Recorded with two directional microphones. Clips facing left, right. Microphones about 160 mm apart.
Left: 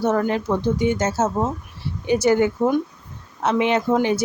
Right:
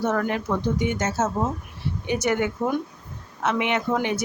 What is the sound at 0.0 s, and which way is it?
Speech, 30° left (ahead or behind).